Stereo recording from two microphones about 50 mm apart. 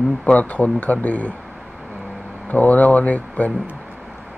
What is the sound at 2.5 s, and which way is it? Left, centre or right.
Speech, left.